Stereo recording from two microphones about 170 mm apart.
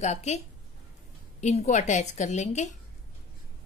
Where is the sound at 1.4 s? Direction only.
45° left (ahead or behind).